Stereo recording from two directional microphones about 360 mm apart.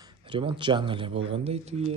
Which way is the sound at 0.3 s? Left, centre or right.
Centre.